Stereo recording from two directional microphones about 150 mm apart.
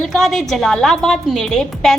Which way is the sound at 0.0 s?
Centre (ahead or behind).